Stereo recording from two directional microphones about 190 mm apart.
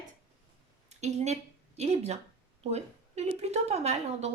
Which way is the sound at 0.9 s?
35° right (ahead or behind).